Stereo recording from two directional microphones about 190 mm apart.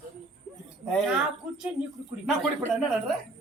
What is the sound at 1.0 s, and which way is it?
Speech, 5° right (ahead or behind).